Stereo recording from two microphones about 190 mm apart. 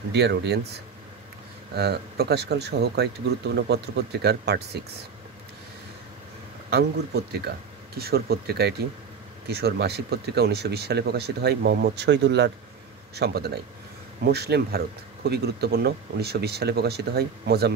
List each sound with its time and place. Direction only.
0.1 s speech: 60° right (ahead or behind)
1.7 s speech: 60° right (ahead or behind)
6.7 s speech: 55° right (ahead or behind)